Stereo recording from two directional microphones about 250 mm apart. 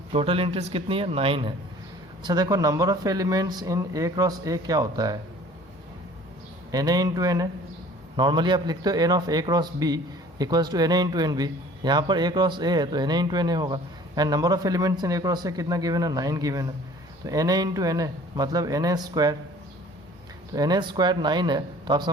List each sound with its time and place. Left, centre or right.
0.1 s a man's voice: right
6.7 s a man's voice: centre
20.5 s a man's voice: centre